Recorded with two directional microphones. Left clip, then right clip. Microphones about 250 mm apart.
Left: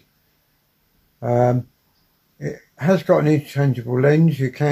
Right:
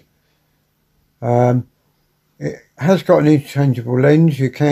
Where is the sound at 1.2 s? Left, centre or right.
Right.